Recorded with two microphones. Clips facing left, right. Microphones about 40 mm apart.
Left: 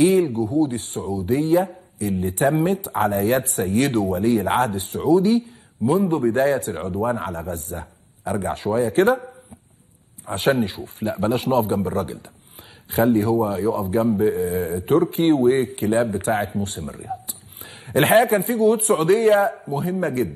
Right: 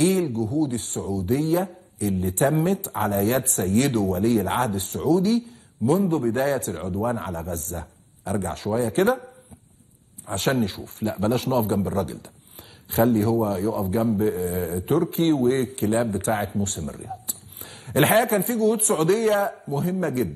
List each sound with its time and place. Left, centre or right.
0.0 s speech: centre
10.2 s speech: centre
16.5 s a sound: centre
17.9 s speech: centre